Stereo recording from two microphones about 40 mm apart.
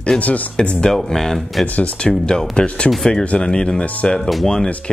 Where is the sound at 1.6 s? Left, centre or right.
Left.